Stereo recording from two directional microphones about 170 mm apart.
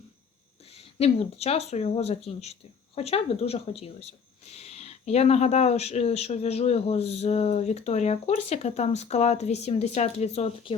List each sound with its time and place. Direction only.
0.7 s speech: 35° left (ahead or behind)